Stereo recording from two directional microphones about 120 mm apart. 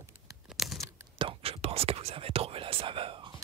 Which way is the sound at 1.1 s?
50° right (ahead or behind).